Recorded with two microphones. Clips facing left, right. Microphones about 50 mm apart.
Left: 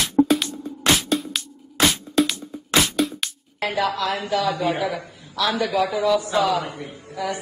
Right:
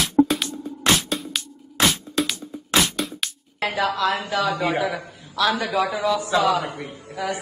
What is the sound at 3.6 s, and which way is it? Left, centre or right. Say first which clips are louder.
A man's voice: even; right.